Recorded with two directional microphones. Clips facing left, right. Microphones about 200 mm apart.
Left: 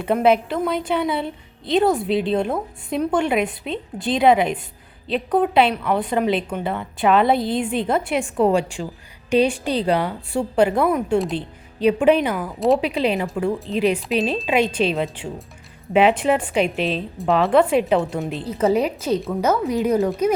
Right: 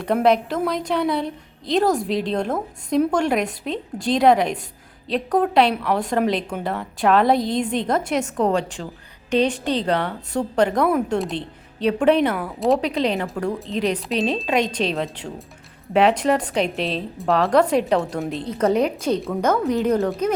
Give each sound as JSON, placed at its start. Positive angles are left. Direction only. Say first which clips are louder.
{"t": 0.0, "sound": "a woman's voice", "louder": "left 1 dB", "side_deg": 5}